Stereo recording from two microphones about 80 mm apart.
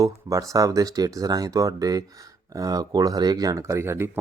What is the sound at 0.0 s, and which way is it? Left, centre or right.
Speech, right.